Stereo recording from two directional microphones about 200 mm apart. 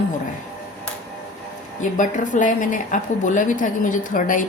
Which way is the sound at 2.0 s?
40° left (ahead or behind).